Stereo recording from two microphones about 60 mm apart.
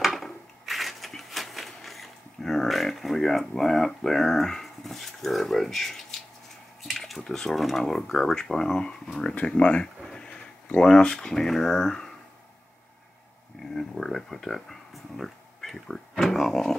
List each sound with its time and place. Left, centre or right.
0.0 s a sound: centre
6.8 s speech: centre
13.7 s speech: centre